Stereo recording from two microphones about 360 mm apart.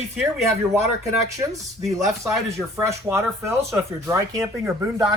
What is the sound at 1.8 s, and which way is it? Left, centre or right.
Speech, centre.